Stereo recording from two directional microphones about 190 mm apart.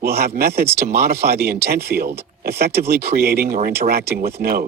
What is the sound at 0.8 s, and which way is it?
Speech, 55° right (ahead or behind).